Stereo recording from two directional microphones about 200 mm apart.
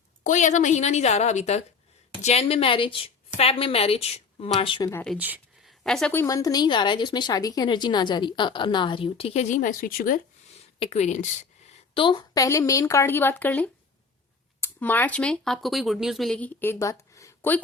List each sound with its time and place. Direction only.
0.3 s a woman's voice: 35° left (ahead or behind)
4.9 s a woman's voice: 10° left (ahead or behind)
5.1 s a sound: 10° right (ahead or behind)
5.8 s a woman's voice: centre (ahead or behind); by 11.3 s 35° left (ahead or behind)
11.9 s a woman's voice: 25° left (ahead or behind)